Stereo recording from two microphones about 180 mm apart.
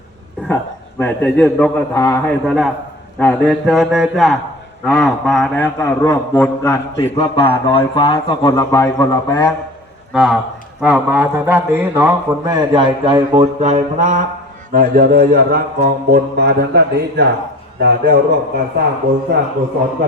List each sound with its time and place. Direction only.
0.4 s a man's voice: 10° left (ahead or behind)
1.9 s a man's voice: 15° left (ahead or behind)
7.2 s speech: 30° left (ahead or behind)
10.1 s a man's voice: centre (ahead or behind); by 18.6 s 55° right (ahead or behind)